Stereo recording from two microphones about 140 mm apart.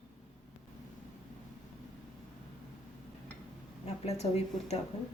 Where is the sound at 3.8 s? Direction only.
50° left (ahead or behind).